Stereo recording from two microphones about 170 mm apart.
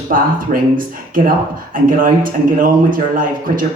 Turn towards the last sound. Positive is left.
turn(degrees=-55)  # may be behind; listen again after turning